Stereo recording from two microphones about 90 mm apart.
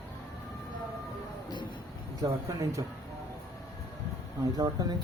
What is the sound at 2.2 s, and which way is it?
Speech, 40° right (ahead or behind).